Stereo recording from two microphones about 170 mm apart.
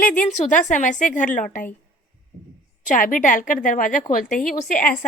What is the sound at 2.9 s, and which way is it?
A woman's voice, 50° left (ahead or behind).